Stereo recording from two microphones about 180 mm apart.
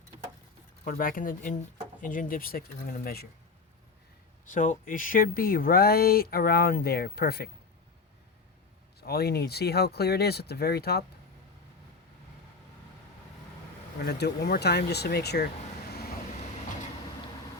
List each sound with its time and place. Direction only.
0.9 s speech: 50° left (ahead or behind)
4.5 s speech: 45° left (ahead or behind)
9.0 s speech: 60° left (ahead or behind)
14.0 s speech: 65° left (ahead or behind)